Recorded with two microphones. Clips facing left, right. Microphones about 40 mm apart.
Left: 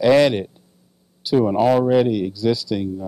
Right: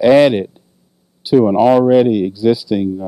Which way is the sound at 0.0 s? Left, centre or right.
Centre.